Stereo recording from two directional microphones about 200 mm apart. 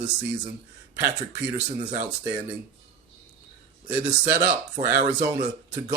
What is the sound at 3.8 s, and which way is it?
Speech, 10° right (ahead or behind).